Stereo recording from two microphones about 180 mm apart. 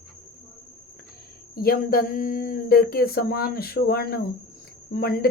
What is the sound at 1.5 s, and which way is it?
Speech, 55° left (ahead or behind).